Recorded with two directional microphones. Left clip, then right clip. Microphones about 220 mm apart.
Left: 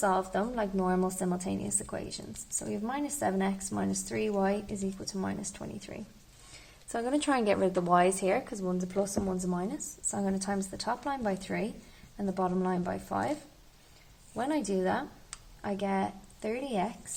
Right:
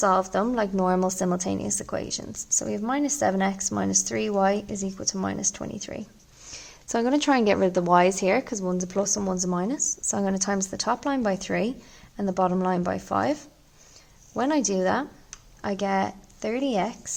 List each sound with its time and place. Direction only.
0.0 s a woman's voice: 40° right (ahead or behind)
14.3 s a woman's voice: 40° right (ahead or behind)